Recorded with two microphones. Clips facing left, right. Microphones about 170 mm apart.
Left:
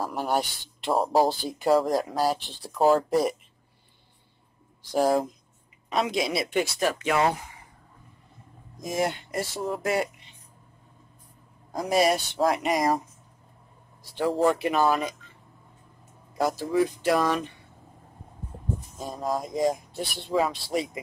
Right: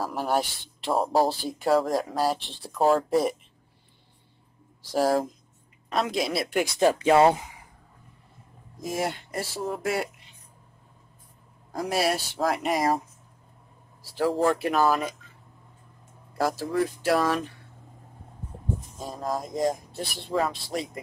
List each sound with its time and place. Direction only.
0.0 s speech: centre (ahead or behind)
4.9 s speech: centre (ahead or behind)
6.8 s speech: 30° right (ahead or behind)
8.8 s speech: centre (ahead or behind)
11.7 s speech: 5° right (ahead or behind)
14.1 s speech: centre (ahead or behind)
16.3 s speech: centre (ahead or behind)
18.9 s speech: centre (ahead or behind)